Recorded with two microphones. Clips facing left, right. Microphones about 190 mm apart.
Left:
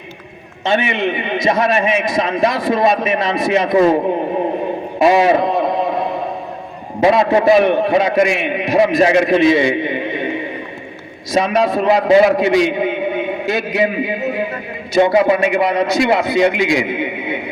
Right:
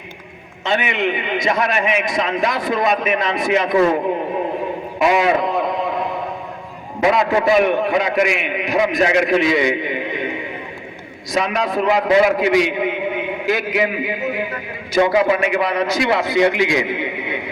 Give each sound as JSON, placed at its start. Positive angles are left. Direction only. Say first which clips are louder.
{"t": 0.6, "sound": "a man's voice", "louder": "left 3 dB", "side_deg": 25}
{"t": 4.9, "sound": "a man's voice", "louder": "left 4 dB", "side_deg": 30}
{"t": 7.0, "sound": "a man's voice", "louder": "left 4 dB", "side_deg": 30}
{"t": 16.8, "sound": "a sound", "louder": "left 3 dB", "side_deg": 25}